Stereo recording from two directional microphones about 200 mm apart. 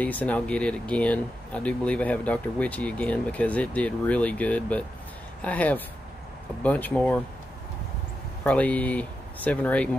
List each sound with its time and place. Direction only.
0.0 s speech: 10° left (ahead or behind)
8.5 s speech: 5° left (ahead or behind)